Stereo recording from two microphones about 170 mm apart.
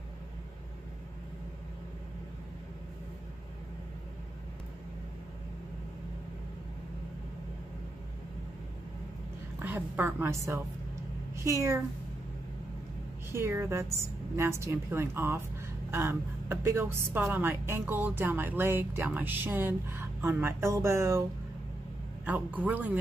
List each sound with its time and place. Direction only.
9.6 s a woman's voice: 10° right (ahead or behind)
13.3 s a woman's voice: 15° right (ahead or behind)